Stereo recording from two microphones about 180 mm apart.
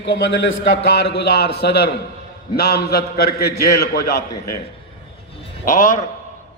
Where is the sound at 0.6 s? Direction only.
65° left (ahead or behind).